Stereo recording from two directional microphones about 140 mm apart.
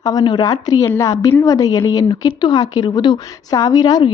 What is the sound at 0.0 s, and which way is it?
A woman's voice, 25° left (ahead or behind).